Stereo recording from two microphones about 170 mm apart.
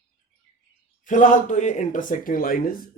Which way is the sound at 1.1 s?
45° left (ahead or behind).